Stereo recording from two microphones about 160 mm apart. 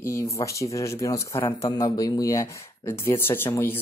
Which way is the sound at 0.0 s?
20° left (ahead or behind).